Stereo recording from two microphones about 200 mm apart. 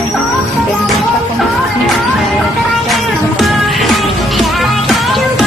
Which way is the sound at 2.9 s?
Centre (ahead or behind).